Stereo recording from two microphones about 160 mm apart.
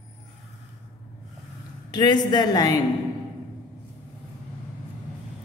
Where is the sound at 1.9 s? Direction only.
25° left (ahead or behind).